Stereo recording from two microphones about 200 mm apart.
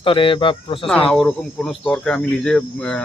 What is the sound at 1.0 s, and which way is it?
Speech, 5° left (ahead or behind).